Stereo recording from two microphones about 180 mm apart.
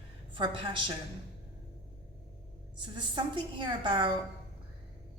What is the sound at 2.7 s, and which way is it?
A woman's voice, 25° right (ahead or behind).